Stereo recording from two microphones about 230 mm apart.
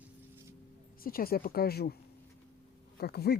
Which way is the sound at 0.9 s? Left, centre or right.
Left.